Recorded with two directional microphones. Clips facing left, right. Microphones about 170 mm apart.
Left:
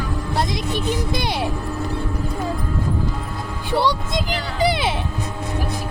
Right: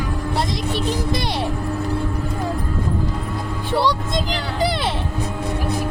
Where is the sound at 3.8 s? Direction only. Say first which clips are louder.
Even; centre (ahead or behind).